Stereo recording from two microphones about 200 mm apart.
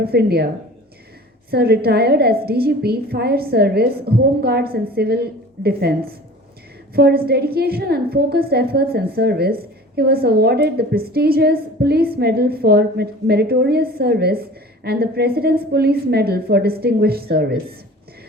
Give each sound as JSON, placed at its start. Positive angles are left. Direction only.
{"t": 0.0, "sound": "a woman's voice", "side_deg": -50}
{"t": 1.5, "sound": "a woman's voice", "side_deg": -55}